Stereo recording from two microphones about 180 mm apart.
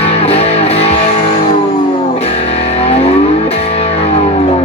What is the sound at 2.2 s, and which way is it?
Music, 35° left (ahead or behind).